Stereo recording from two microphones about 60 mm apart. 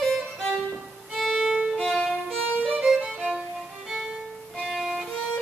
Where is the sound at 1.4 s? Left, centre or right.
Centre.